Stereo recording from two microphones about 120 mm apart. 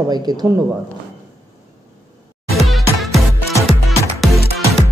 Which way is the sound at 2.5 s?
Centre (ahead or behind).